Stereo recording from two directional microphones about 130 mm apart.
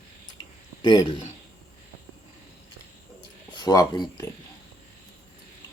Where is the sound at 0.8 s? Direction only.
35° left (ahead or behind).